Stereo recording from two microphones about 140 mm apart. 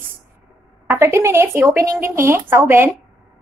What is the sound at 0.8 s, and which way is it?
Speech, 15° right (ahead or behind).